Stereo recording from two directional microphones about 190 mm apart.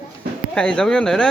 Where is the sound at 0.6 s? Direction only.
5° left (ahead or behind).